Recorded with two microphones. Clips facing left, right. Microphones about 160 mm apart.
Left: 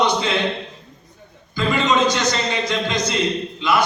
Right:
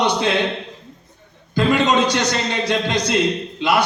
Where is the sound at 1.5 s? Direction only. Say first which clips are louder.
Right 2 dB; 60° right (ahead or behind).